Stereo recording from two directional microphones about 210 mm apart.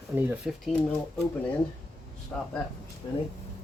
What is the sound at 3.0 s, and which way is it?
Speech, 20° left (ahead or behind).